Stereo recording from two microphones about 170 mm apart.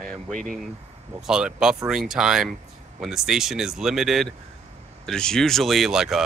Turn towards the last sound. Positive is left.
turn(degrees=0)  # may be behind; listen again after turning